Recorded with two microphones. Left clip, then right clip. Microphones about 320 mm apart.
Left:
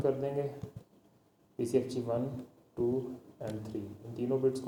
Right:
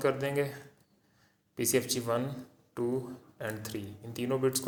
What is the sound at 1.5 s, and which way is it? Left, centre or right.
Speech, right.